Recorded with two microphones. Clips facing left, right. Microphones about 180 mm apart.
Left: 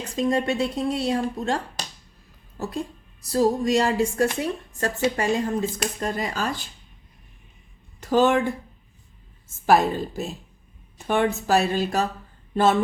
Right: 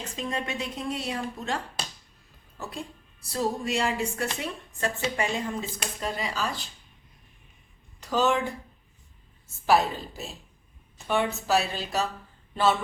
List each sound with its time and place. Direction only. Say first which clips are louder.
0.0 s a woman's voice: left 9 dB; 40° left (ahead or behind)
8.0 s a woman's voice: left 5 dB; 50° left (ahead or behind)
9.6 s a woman's voice: left 4 dB; 50° left (ahead or behind)